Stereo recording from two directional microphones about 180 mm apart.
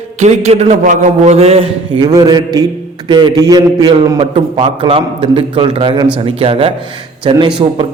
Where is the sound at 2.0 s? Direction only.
20° right (ahead or behind).